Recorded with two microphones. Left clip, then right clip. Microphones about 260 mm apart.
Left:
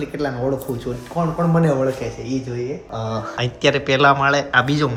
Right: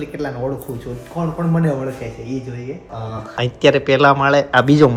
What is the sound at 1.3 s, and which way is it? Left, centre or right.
Speech, centre.